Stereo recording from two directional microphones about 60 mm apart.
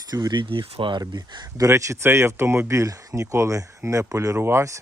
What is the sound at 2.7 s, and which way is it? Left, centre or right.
Speech, right.